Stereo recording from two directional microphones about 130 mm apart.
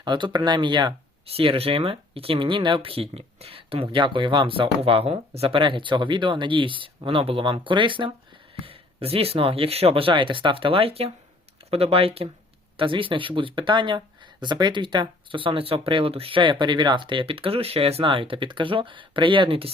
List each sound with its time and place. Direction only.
0.0 s speech: 35° right (ahead or behind)